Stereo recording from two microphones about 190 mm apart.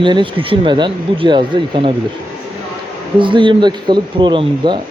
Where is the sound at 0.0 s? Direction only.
25° right (ahead or behind).